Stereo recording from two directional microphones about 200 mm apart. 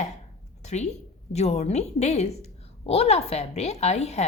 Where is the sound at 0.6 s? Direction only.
35° left (ahead or behind).